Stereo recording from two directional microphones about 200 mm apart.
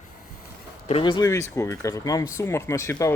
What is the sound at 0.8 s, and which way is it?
Speech, 25° left (ahead or behind).